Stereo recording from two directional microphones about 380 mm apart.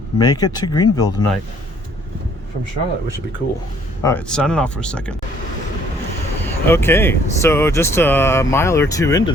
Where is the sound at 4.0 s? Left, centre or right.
Centre.